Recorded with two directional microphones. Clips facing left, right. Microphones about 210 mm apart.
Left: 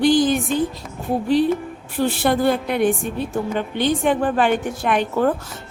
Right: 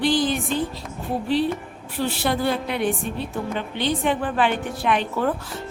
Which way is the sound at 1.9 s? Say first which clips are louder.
Left 5 dB; 50° left (ahead or behind).